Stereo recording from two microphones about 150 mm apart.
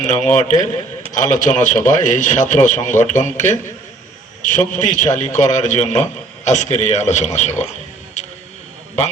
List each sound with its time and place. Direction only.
0.0 s a man's voice: 55° left (ahead or behind)